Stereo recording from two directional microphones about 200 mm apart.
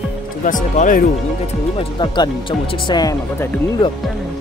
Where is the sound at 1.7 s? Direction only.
20° left (ahead or behind).